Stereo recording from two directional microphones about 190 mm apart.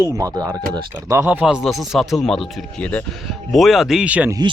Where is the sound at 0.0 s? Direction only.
15° right (ahead or behind).